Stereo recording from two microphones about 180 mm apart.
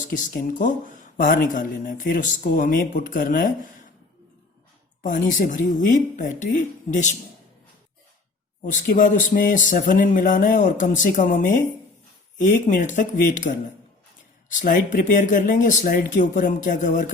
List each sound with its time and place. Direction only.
0.0 s speech: 45° left (ahead or behind)
5.0 s speech: 45° left (ahead or behind)
8.6 s speech: 45° left (ahead or behind)
14.6 s speech: 50° left (ahead or behind)